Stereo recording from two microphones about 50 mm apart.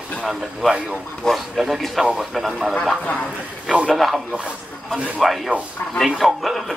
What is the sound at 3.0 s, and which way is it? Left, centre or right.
Speech, left.